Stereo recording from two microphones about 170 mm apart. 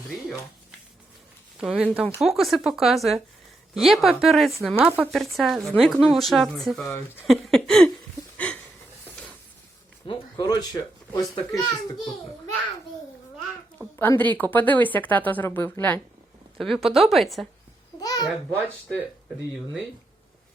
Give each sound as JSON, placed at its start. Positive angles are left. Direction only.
{"t": 0.1, "sound": "speech", "side_deg": 0}
{"t": 1.5, "sound": "speech", "side_deg": -5}
{"t": 7.3, "sound": "a sound", "side_deg": 0}
{"t": 10.1, "sound": "a sound", "side_deg": 25}
{"t": 10.6, "sound": "speech", "side_deg": 20}
{"t": 13.9, "sound": "a woman's voice", "side_deg": 15}
{"t": 16.6, "sound": "speech", "side_deg": 0}
{"t": 18.0, "sound": "babbling", "side_deg": 25}